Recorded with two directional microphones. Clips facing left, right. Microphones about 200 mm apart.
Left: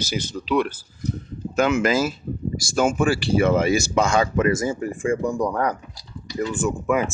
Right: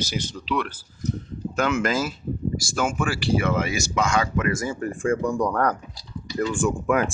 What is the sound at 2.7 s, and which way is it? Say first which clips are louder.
Speech: left 7 dB; 25° left (ahead or behind).